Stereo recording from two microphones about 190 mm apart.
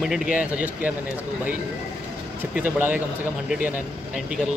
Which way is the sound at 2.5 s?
10° right (ahead or behind).